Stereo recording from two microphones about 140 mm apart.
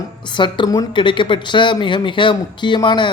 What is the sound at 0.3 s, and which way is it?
Speech, 35° left (ahead or behind).